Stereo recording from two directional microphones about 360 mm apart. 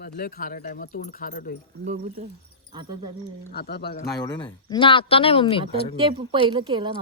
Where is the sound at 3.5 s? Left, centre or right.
Left.